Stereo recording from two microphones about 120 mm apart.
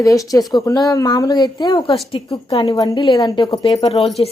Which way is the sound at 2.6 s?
35° left (ahead or behind).